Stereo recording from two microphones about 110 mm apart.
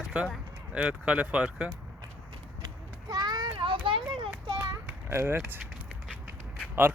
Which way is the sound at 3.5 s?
50° right (ahead or behind).